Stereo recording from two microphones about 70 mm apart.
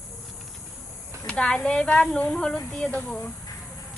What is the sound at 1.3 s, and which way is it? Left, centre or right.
Speech, centre.